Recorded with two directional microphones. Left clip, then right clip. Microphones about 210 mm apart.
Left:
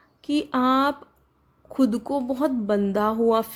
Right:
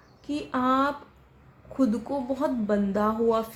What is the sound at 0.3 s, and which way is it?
A woman's voice, 40° left (ahead or behind).